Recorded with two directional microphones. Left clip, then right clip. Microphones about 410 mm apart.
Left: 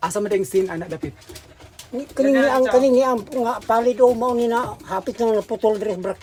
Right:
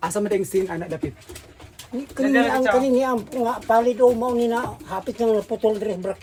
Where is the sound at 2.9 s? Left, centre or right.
Centre.